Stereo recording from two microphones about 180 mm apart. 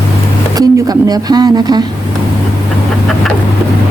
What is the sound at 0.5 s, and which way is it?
Speech, 20° right (ahead or behind).